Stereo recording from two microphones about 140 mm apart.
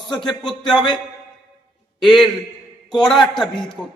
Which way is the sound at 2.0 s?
Centre (ahead or behind).